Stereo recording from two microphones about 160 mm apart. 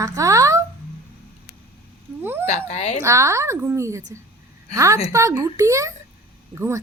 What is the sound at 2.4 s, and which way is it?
Speech, 40° left (ahead or behind).